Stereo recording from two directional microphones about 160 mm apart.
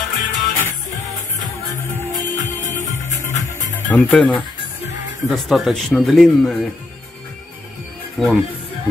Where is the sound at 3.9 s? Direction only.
5° left (ahead or behind).